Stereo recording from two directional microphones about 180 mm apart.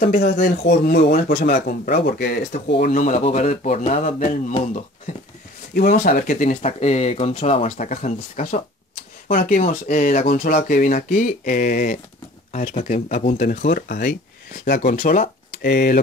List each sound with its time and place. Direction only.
0.0 s speech: 55° left (ahead or behind)
5.8 s speech: 50° left (ahead or behind)